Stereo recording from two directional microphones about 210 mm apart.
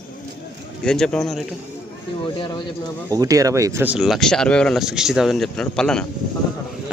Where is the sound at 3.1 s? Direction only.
15° right (ahead or behind).